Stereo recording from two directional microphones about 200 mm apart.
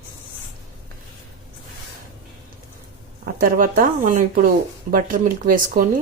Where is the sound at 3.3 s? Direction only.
45° right (ahead or behind).